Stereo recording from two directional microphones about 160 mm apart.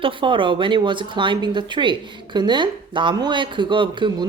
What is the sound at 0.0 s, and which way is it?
Speech, 30° right (ahead or behind).